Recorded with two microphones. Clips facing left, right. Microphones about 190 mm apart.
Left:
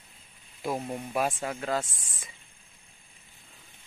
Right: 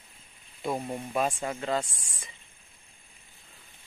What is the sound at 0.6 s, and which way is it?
Speech, centre (ahead or behind).